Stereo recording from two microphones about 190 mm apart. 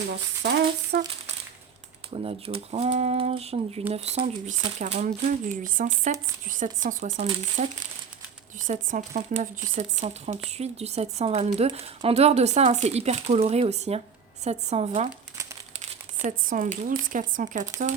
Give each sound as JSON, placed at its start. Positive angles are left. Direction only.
{"t": 0.4, "sound": "a sound", "side_deg": -60}
{"t": 2.0, "sound": "speech", "side_deg": -30}
{"t": 15.7, "sound": "crumpling", "side_deg": -35}
{"t": 16.2, "sound": "speech", "side_deg": -45}